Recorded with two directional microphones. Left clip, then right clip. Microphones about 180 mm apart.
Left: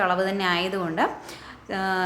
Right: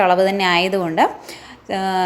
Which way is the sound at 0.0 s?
30° right (ahead or behind).